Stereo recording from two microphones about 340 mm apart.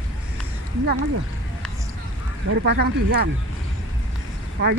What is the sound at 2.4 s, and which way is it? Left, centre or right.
Speech, right.